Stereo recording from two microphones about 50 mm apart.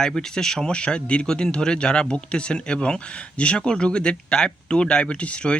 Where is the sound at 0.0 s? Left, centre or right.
Centre.